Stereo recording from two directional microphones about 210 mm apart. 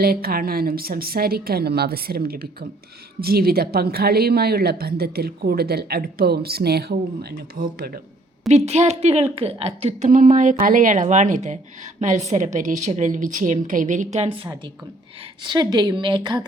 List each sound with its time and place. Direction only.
0.0 s a woman's voice: 45° right (ahead or behind)
8.4 s a woman's voice: 30° right (ahead or behind)